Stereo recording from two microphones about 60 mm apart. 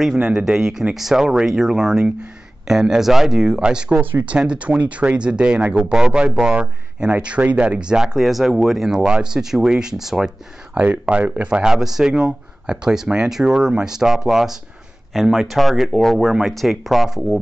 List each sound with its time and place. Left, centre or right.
0.2 s speech: centre
4.0 s speech: right
4.4 s speech: centre
8.2 s speech: centre
10.7 s speech: right; by 17.4 s centre